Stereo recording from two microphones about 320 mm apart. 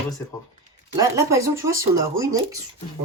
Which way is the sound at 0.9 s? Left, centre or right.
Centre.